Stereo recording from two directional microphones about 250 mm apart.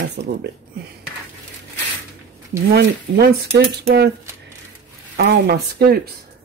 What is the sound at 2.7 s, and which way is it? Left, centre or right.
Cutlery, right.